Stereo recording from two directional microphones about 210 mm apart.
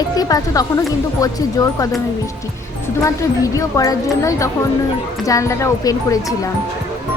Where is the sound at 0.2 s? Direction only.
15° left (ahead or behind).